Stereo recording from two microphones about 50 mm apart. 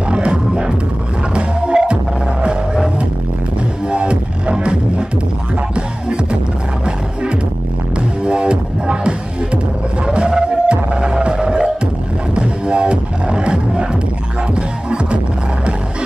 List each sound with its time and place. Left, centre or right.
0.1 s music: right
8.3 s music: right